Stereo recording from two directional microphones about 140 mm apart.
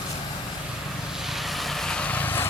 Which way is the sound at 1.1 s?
Centre (ahead or behind).